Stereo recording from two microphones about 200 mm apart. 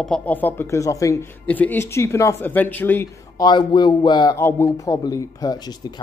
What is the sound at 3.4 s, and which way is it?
A man's voice, 20° left (ahead or behind).